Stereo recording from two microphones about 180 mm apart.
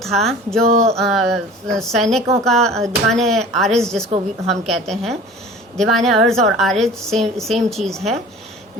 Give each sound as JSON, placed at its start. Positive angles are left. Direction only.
{"t": 0.0, "sound": "a woman's voice", "side_deg": 0}